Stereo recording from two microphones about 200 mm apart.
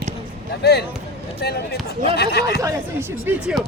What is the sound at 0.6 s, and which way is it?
Speech, 55° left (ahead or behind).